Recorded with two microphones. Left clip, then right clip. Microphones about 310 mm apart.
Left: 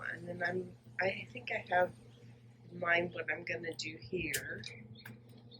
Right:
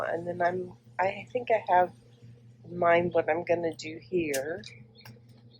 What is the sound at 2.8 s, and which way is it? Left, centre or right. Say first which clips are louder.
Speech: right 10 dB; centre.